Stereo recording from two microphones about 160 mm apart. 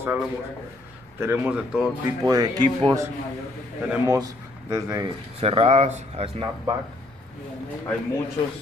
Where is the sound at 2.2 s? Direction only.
25° right (ahead or behind).